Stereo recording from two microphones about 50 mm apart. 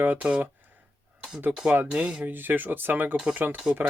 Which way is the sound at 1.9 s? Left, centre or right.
Centre.